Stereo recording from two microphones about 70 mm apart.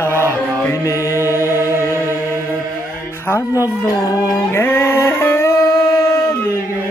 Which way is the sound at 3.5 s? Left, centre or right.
Left.